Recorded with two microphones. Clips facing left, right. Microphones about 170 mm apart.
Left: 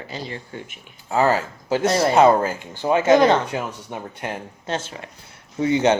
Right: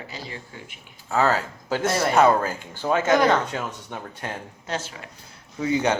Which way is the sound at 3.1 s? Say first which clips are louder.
Left 5 dB; 25° left (ahead or behind).